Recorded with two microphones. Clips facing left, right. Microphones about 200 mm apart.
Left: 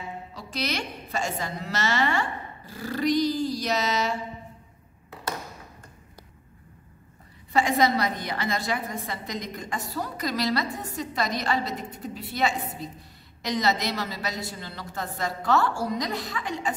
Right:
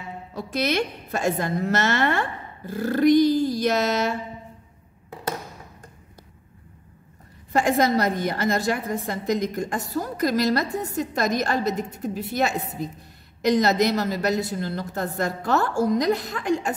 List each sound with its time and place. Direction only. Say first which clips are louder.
0.3 s a woman's voice: right 8 dB; 50° right (ahead or behind)
7.5 s a woman's voice: right 3 dB; 45° right (ahead or behind)